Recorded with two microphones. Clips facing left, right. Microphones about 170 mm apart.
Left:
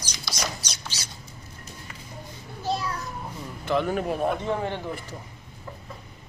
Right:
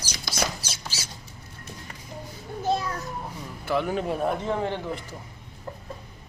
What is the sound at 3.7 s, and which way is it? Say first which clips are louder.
Speech: left 1 dB; 10° right (ahead or behind).